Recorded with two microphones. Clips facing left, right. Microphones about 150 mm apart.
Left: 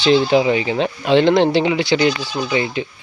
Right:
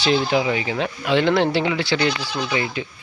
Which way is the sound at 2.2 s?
30° left (ahead or behind).